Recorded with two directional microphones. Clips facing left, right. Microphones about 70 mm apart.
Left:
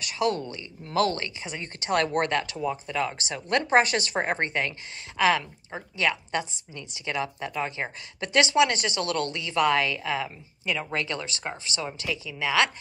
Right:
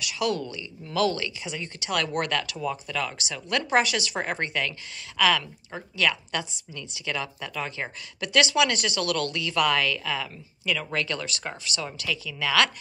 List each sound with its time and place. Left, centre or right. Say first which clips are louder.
0.0 s a woman's voice: left 1 dB; left